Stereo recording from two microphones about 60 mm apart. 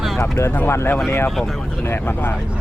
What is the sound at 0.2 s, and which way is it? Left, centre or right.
Speech, left.